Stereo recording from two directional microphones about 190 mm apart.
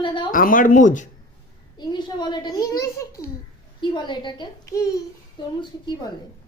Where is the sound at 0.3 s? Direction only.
45° left (ahead or behind).